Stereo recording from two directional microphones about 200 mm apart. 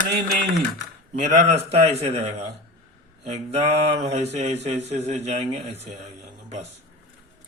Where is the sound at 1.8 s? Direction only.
30° right (ahead or behind).